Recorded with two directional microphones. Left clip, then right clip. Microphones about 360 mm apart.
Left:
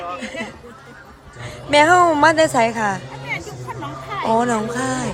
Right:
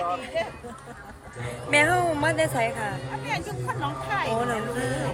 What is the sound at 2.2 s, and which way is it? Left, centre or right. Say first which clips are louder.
Speech: left 10 dB; left.